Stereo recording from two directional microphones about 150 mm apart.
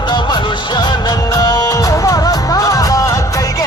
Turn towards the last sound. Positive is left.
turn(degrees=20)  # may be behind; listen again after turning